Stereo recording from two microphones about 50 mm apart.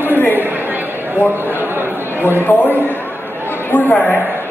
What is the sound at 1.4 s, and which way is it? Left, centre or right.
Speech, right.